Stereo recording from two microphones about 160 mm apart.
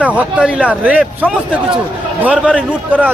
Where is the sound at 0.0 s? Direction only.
10° right (ahead or behind).